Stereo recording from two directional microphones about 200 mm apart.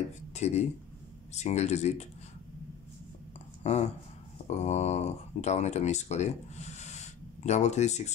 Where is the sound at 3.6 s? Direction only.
35° left (ahead or behind).